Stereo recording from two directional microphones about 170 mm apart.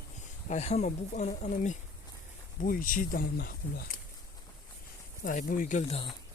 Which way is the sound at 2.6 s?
55° left (ahead or behind).